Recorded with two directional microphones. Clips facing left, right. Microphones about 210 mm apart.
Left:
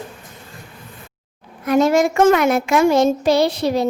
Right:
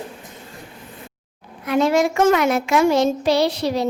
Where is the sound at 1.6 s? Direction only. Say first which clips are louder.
Left 3 dB; 45° left (ahead or behind).